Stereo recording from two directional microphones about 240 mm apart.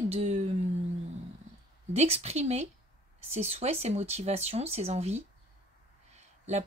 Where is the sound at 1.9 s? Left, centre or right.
Right.